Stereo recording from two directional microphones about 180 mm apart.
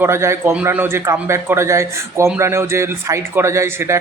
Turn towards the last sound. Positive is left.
turn(degrees=-15)  # may be behind; listen again after turning